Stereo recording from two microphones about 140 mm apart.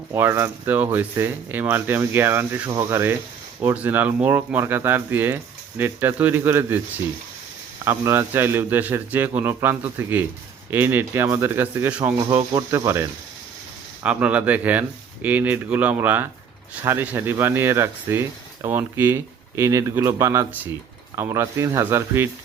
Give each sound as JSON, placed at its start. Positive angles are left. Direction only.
{"t": 0.1, "sound": "speech", "side_deg": -20}
{"t": 12.2, "sound": "speech", "side_deg": -25}
{"t": 14.0, "sound": "speech", "side_deg": -10}